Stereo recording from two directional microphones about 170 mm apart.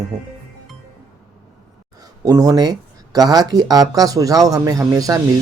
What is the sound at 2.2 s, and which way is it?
Speech, 20° right (ahead or behind).